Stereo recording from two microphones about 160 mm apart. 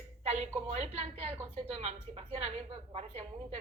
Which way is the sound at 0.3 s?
45° right (ahead or behind).